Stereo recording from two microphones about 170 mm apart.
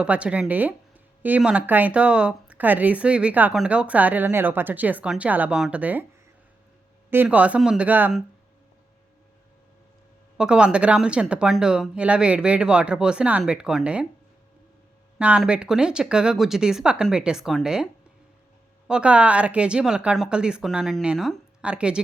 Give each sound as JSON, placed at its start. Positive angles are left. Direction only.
{"t": 0.0, "sound": "speech", "side_deg": -5}
{"t": 7.1, "sound": "speech", "side_deg": -10}
{"t": 10.3, "sound": "speech", "side_deg": -5}
{"t": 15.2, "sound": "speech", "side_deg": -5}
{"t": 18.9, "sound": "speech", "side_deg": -5}